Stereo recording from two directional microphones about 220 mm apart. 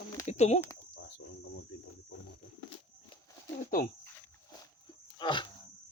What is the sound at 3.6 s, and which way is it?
Speech, 35° left (ahead or behind).